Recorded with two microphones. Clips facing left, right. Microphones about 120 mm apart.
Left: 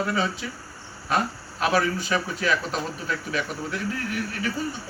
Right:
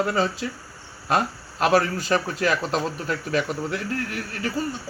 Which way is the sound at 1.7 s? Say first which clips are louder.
Right 3 dB; 40° right (ahead or behind).